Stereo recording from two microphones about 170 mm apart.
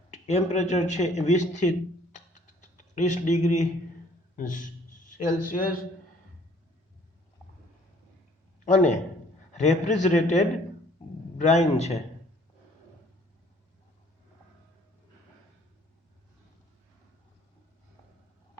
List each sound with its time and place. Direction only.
0.1 s speech: 40° left (ahead or behind)
2.1 s a sound: 45° left (ahead or behind)
3.4 s a man's voice: 45° left (ahead or behind)
8.6 s a man's voice: 45° left (ahead or behind)